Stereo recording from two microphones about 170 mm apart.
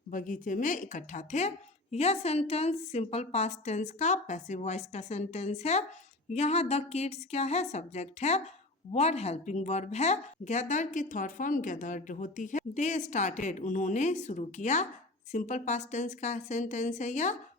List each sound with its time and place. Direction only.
0.1 s a woman's voice: 50° left (ahead or behind)